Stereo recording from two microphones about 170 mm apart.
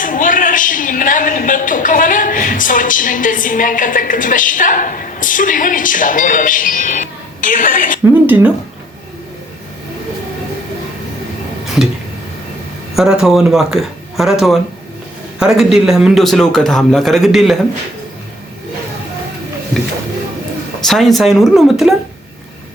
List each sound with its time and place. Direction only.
0.0 s a man's voice: 50° left (ahead or behind)
8.3 s speech: 10° right (ahead or behind)
13.0 s a man's voice: centre (ahead or behind)
20.8 s a man's voice: centre (ahead or behind)